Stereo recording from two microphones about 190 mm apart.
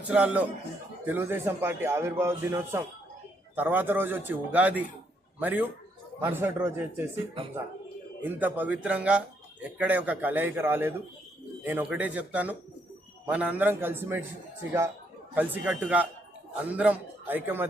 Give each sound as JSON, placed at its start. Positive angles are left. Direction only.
{"t": 0.1, "sound": "a man's voice", "side_deg": -5}
{"t": 8.2, "sound": "a man's voice", "side_deg": -10}
{"t": 15.4, "sound": "a man's voice", "side_deg": -10}